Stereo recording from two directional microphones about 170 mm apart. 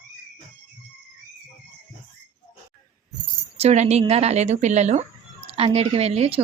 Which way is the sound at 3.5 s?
40° right (ahead or behind).